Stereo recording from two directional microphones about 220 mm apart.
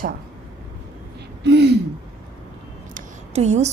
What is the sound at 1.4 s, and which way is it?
Speech, 50° right (ahead or behind).